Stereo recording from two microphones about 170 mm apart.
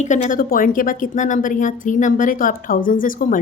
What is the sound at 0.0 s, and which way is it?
A woman's voice, 45° left (ahead or behind).